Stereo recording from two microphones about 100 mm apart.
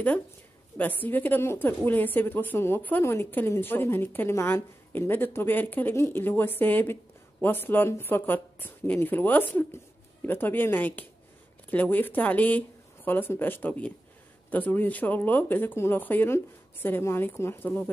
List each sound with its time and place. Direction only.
0.7 s a woman's voice: 15° left (ahead or behind)